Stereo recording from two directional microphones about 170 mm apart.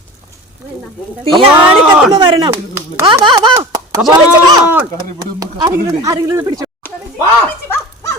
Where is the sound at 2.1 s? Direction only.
30° right (ahead or behind).